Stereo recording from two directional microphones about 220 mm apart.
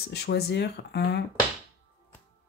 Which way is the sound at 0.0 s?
50° left (ahead or behind).